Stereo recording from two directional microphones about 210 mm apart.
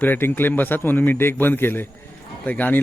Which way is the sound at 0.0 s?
10° left (ahead or behind).